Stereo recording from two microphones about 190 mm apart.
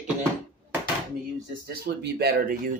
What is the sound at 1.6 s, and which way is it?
Speech, 55° right (ahead or behind).